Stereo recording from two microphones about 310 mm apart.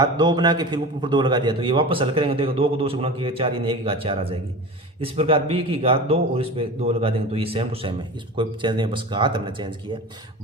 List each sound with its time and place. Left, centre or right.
0.0 s a man's voice: centre